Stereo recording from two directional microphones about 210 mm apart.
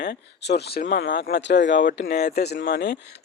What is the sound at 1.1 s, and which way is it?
Speech, 50° left (ahead or behind).